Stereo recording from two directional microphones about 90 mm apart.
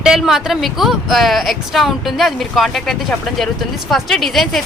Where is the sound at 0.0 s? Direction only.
5° right (ahead or behind).